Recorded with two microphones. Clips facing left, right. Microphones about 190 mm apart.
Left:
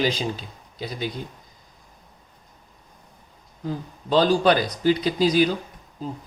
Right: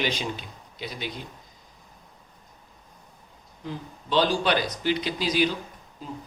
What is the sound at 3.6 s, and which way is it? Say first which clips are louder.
Speech: left 5 dB; 40° left (ahead or behind).